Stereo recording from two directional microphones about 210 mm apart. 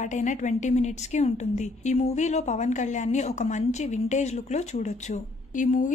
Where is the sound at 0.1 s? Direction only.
35° left (ahead or behind).